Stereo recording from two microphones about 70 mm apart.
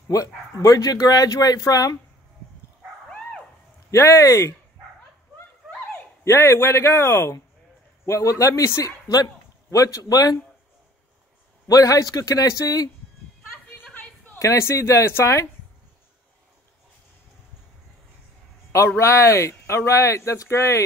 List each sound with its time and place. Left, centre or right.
0.1 s speech: left
3.1 s dog: centre
3.9 s speech: left
6.2 s speech: left
8.0 s speech: left
11.6 s speech: left
13.9 s a sound: left
14.4 s speech: left
18.9 s speech: left